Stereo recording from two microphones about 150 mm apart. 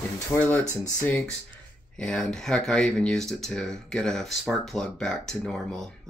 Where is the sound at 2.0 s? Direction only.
5° left (ahead or behind).